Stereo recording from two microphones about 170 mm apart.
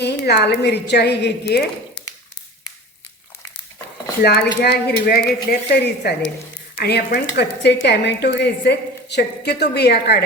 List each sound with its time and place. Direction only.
0.0 s a woman's voice: 75° left (ahead or behind)
4.2 s a woman's voice: 70° left (ahead or behind)